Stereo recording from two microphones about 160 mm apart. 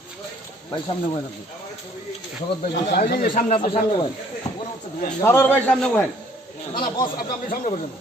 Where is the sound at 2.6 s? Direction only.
70° left (ahead or behind).